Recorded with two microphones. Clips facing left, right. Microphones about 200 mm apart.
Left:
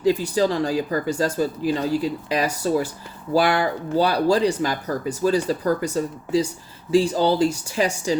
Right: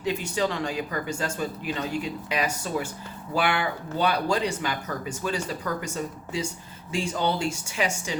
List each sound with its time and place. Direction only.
0.0 s speech: 35° left (ahead or behind)